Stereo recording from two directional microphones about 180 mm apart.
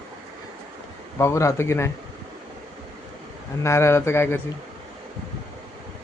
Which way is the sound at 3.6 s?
15° left (ahead or behind).